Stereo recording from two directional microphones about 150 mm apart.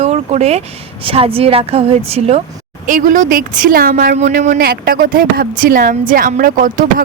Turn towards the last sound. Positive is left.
turn(degrees=-65)  # may be behind; listen again after turning